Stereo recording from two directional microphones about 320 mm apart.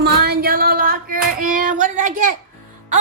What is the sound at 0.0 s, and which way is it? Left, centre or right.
Child singing, right.